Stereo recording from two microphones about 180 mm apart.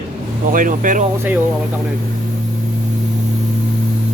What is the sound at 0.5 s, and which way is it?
Speech, 50° right (ahead or behind).